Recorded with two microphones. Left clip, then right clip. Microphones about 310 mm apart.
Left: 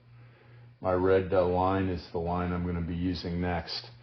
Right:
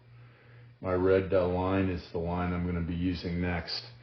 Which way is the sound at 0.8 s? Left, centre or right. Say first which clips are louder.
Left 1 dB; centre.